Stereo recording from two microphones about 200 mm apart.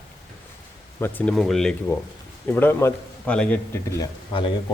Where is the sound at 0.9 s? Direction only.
10° left (ahead or behind).